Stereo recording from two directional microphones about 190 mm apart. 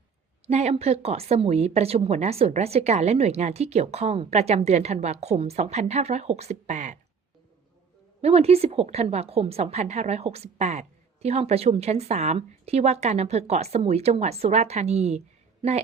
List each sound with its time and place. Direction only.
0.4 s a woman's voice: 35° right (ahead or behind)
8.2 s a woman's voice: 35° right (ahead or behind)